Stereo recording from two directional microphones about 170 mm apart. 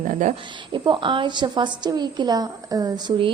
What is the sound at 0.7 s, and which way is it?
A woman's voice, 30° right (ahead or behind).